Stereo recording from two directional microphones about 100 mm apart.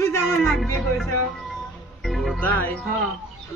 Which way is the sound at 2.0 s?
Centre (ahead or behind).